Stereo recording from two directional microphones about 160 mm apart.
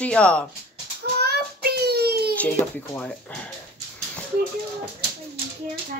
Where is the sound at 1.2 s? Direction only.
80° right.